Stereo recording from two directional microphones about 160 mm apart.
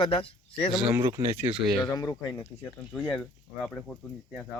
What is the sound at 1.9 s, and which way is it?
Speech, 25° left (ahead or behind).